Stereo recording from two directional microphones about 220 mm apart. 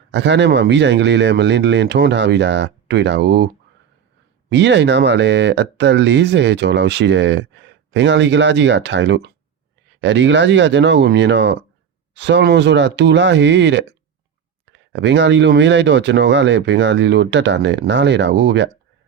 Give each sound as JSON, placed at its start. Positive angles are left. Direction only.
{"t": 0.1, "sound": "speech", "side_deg": -50}